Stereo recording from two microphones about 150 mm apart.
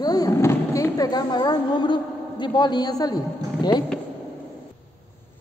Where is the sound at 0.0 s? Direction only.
25° left (ahead or behind).